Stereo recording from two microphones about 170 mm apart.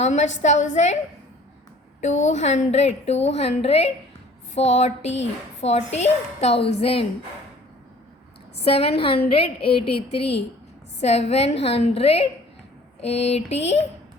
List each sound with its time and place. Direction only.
0.0 s a woman's voice: 45° left (ahead or behind)
2.0 s a woman's voice: 45° left (ahead or behind)
8.6 s a woman's voice: 35° left (ahead or behind)